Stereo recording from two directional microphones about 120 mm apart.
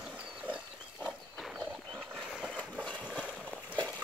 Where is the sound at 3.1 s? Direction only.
15° left (ahead or behind).